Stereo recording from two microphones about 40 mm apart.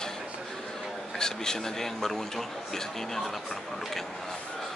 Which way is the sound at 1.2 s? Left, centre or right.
Centre.